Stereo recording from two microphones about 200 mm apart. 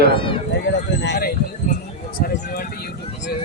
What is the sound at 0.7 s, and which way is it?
Speech, 60° left (ahead or behind).